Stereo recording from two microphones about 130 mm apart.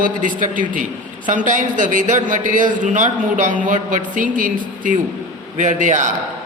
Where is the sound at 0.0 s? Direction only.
90° right.